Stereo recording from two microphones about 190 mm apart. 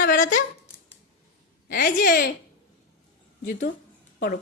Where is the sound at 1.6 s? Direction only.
50° left (ahead or behind).